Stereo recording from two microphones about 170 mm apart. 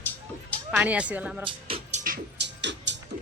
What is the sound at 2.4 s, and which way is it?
Music, 90° right.